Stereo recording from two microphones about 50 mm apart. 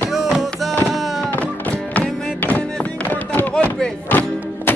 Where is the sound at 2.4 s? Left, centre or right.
Left.